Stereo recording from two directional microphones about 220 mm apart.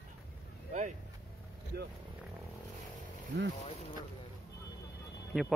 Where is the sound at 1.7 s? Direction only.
45° right (ahead or behind).